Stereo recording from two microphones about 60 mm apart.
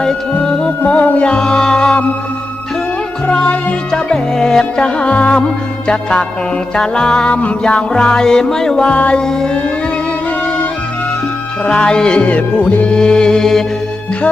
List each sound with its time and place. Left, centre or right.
0.0 s music: centre
3.2 s music: centre
11.6 s music: centre